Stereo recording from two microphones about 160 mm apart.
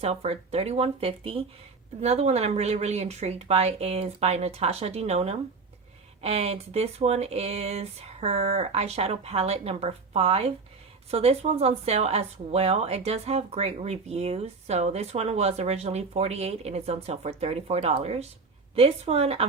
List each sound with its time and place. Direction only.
0.0 s speech: 40° right (ahead or behind)